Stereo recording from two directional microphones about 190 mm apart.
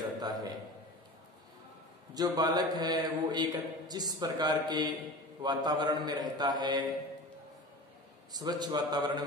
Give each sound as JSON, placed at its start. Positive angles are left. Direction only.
{"t": 0.0, "sound": "a sound", "side_deg": -20}
{"t": 2.1, "sound": "a man's voice", "side_deg": -20}
{"t": 8.3, "sound": "a man's voice", "side_deg": -20}